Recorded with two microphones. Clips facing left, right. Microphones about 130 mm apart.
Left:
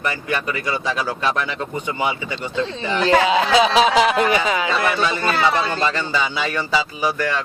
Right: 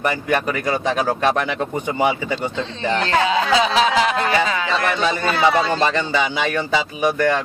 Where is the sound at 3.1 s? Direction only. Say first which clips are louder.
Left 3 dB; 15° left (ahead or behind).